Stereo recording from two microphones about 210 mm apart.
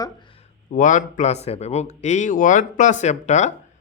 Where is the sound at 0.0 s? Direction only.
25° left (ahead or behind).